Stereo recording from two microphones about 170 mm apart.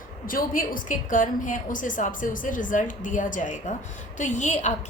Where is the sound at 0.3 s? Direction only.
55° left (ahead or behind).